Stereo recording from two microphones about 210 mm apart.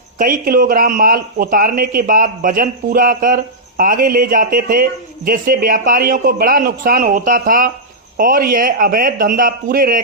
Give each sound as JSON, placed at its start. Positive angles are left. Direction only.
{"t": 0.2, "sound": "a man's voice", "side_deg": -40}